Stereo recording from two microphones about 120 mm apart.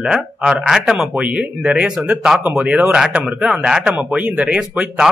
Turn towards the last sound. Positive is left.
turn(degrees=-10)  # may be behind; listen again after turning